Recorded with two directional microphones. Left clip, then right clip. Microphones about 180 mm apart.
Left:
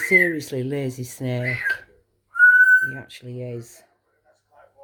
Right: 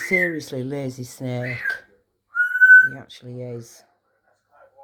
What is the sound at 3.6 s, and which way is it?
Speech, 30° left (ahead or behind).